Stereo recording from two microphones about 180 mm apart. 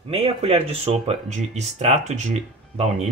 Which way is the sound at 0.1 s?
35° right (ahead or behind).